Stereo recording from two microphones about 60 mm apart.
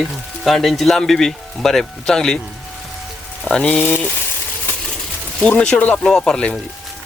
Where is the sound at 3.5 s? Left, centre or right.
Centre.